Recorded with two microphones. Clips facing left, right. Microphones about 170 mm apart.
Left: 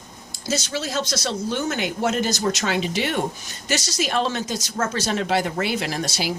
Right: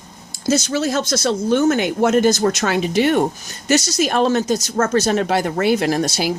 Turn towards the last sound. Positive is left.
turn(degrees=-45)  # may be behind; listen again after turning